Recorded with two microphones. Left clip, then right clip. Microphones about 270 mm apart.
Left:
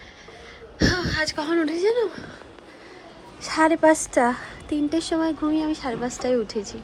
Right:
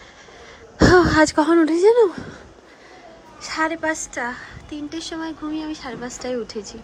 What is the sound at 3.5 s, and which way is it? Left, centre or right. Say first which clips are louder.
A woman's voice: left 5 dB; centre.